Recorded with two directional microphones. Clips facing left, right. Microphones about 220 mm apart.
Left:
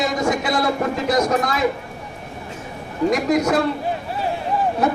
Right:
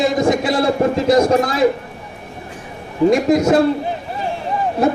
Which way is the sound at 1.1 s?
30° right (ahead or behind).